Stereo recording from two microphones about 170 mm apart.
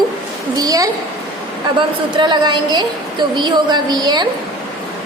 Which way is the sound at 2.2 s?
25° right (ahead or behind).